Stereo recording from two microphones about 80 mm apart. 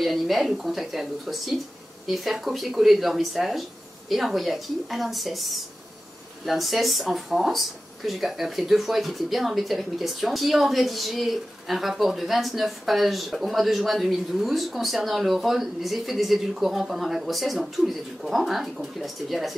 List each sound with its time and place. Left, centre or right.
0.0 s speech: centre